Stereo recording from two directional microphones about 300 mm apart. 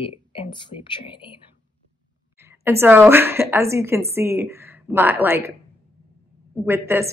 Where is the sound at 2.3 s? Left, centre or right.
Centre.